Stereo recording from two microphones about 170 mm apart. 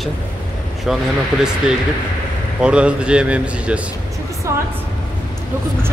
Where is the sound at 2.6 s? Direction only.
5° right (ahead or behind).